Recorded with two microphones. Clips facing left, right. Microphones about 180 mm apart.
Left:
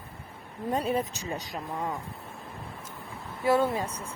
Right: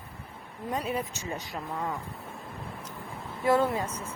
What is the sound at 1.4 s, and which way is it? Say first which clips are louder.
Speech: even; 10° left (ahead or behind).